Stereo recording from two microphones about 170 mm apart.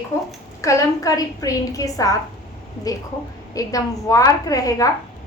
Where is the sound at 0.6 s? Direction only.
20° left (ahead or behind).